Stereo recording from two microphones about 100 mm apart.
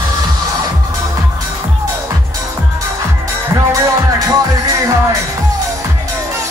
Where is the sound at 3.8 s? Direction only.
30° right (ahead or behind).